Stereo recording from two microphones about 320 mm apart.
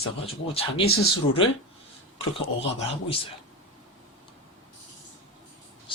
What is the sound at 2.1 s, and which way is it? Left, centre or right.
Speech, centre.